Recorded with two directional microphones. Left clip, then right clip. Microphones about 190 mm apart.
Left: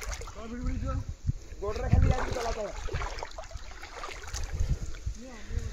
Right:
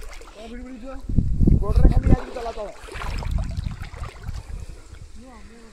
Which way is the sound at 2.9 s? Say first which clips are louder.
Right 3 dB; 45° right (ahead or behind).